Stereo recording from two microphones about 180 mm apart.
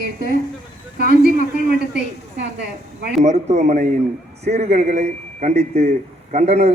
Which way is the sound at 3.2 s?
40° right (ahead or behind).